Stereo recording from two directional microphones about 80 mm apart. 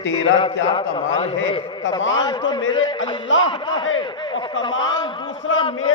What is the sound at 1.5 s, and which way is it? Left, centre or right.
A man's voice, left.